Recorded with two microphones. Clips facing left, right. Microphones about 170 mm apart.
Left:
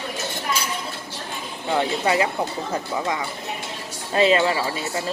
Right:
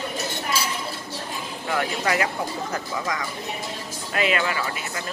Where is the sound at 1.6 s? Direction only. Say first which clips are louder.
Left 4 dB; 25° left (ahead or behind).